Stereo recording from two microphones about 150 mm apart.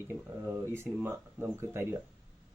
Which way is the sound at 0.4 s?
15° right (ahead or behind).